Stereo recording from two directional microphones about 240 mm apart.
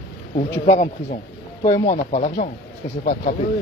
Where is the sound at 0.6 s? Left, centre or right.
Left.